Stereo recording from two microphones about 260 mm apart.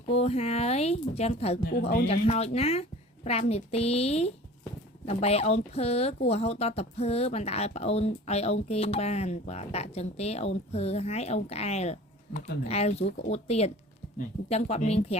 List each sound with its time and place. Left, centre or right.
0.1 s speech: left